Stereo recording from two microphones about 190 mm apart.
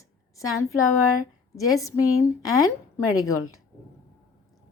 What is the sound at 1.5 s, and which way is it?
Speech, 15° left (ahead or behind).